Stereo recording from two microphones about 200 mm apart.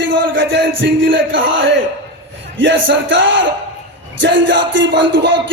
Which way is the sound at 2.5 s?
65° right (ahead or behind).